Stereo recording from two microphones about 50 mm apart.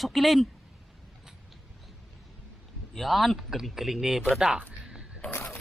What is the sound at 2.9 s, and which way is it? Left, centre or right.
A man's voice, centre.